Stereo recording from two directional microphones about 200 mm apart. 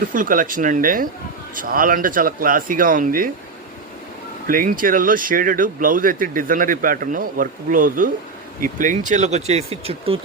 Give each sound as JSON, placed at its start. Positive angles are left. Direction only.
{"t": 0.1, "sound": "speech", "side_deg": -40}
{"t": 4.4, "sound": "speech", "side_deg": -45}